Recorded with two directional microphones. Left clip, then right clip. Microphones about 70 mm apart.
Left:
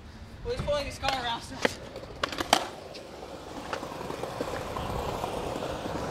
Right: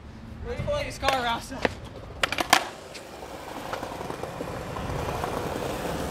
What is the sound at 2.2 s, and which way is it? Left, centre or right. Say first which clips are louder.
Typing: right 4 dB; right.